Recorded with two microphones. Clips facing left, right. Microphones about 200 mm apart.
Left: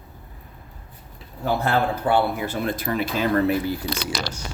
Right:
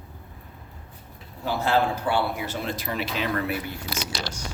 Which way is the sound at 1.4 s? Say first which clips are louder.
Left 1 dB; 55° left (ahead or behind).